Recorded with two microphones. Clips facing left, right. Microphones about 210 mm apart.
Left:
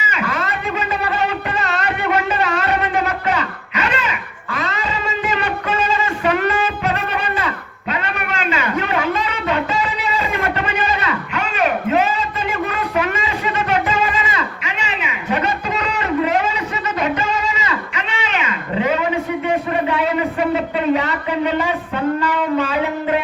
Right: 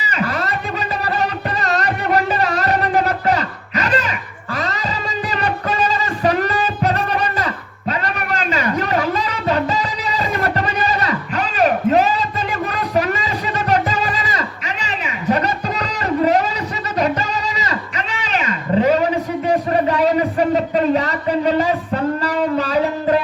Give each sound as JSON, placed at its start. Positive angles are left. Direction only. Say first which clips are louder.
{"t": 0.0, "sound": "a sound", "louder": "right 1 dB", "side_deg": -40}
{"t": 1.1, "sound": "music", "louder": "even", "side_deg": -40}
{"t": 4.5, "sound": "cat", "louder": "right 1 dB", "side_deg": -35}
{"t": 5.3, "sound": "music", "louder": "right 2 dB", "side_deg": -40}
{"t": 8.0, "sound": "a sound", "louder": "right 1 dB", "side_deg": -40}
{"t": 17.0, "sound": "cat", "louder": "right 2 dB", "side_deg": -40}